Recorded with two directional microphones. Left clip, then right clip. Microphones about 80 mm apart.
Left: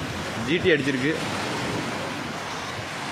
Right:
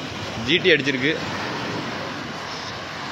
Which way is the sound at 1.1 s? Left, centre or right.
Centre.